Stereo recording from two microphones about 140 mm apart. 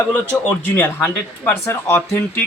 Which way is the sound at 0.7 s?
15° left (ahead or behind).